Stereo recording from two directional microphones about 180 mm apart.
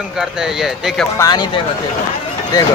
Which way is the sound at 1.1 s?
20° left (ahead or behind).